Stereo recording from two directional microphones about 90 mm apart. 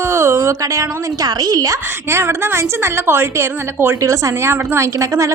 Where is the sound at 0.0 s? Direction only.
30° right (ahead or behind).